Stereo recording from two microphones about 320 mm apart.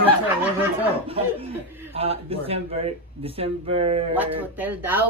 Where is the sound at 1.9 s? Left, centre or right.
Centre.